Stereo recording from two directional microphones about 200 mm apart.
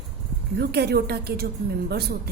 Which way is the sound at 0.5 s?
55° right (ahead or behind).